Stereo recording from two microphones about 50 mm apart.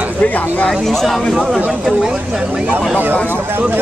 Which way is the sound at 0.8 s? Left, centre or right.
Centre.